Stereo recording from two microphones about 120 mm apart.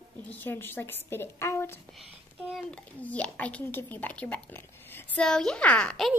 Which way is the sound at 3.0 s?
10° left (ahead or behind).